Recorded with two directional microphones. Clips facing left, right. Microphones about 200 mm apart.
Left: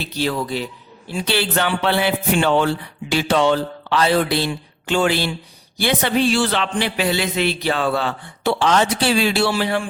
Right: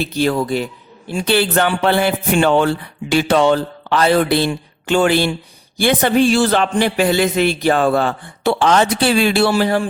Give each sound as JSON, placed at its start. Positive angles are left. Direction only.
{"t": 0.0, "sound": "a man's voice", "side_deg": -50}